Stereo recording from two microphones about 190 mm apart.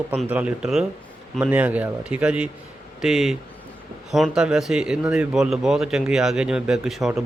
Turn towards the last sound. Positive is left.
turn(degrees=0)  # may be behind; listen again after turning